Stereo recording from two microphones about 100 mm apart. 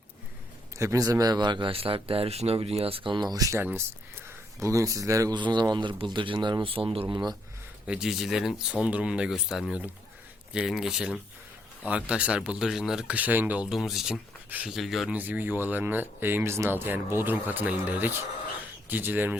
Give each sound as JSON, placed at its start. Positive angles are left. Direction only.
{"t": 0.8, "sound": "speech", "side_deg": -35}
{"t": 3.6, "sound": "speech", "side_deg": -20}
{"t": 5.3, "sound": "speech", "side_deg": -50}
{"t": 7.1, "sound": "speech", "side_deg": -45}
{"t": 7.9, "sound": "speech", "side_deg": -5}
{"t": 13.7, "sound": "speech", "side_deg": 0}
{"t": 15.1, "sound": "speech", "side_deg": -15}